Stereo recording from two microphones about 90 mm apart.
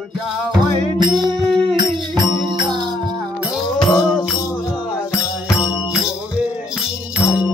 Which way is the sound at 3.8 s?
45° left (ahead or behind).